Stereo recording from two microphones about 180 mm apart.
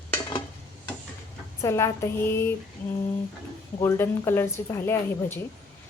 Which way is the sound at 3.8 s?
15° left (ahead or behind).